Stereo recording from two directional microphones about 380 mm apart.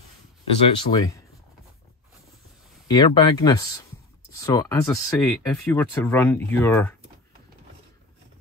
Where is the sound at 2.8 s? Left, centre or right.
Centre.